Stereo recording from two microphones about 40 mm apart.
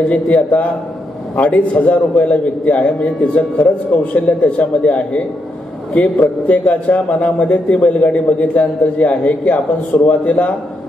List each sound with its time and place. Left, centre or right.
0.1 s a man's voice: left